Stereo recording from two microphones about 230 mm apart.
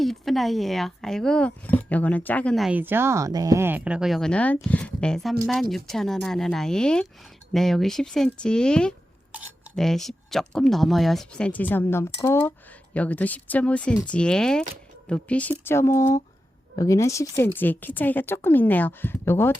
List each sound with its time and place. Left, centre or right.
0.0 s a woman's voice: centre